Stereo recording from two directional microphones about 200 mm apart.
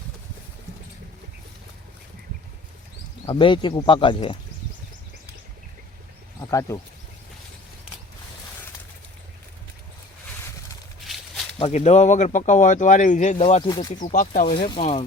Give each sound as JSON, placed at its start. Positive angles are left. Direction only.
{"t": 3.2, "sound": "speech", "side_deg": 25}
{"t": 6.5, "sound": "speech", "side_deg": 15}
{"t": 11.0, "sound": "a sound", "side_deg": 0}
{"t": 11.6, "sound": "speech", "side_deg": 35}
{"t": 14.0, "sound": "speech", "side_deg": 40}
{"t": 14.4, "sound": "speech", "side_deg": 25}